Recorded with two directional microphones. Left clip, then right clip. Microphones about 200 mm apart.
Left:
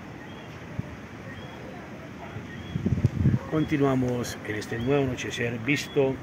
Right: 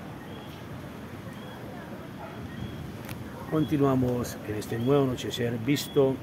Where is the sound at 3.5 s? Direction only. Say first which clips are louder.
Even; 15° left (ahead or behind).